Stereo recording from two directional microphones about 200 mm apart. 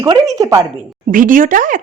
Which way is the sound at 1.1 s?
45° right (ahead or behind).